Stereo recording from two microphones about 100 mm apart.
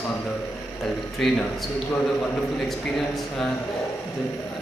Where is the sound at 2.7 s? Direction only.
5° left (ahead or behind).